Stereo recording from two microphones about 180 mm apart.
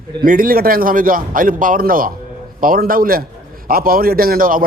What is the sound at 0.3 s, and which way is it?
A man's voice, 50° right (ahead or behind).